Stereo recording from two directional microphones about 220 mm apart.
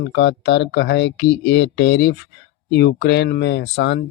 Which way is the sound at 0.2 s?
50° left (ahead or behind).